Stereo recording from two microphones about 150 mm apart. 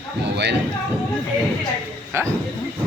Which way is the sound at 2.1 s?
15° right (ahead or behind).